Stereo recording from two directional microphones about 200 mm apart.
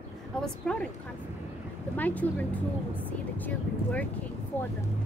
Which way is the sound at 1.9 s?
10° left (ahead or behind).